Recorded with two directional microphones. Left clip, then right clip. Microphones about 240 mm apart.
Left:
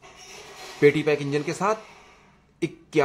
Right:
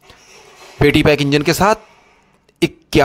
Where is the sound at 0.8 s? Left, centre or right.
Right.